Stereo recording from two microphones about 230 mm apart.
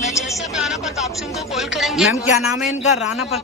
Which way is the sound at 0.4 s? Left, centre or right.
Centre.